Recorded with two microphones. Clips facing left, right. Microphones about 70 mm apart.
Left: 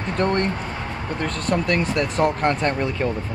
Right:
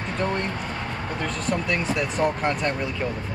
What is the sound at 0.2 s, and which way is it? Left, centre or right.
Speech, left.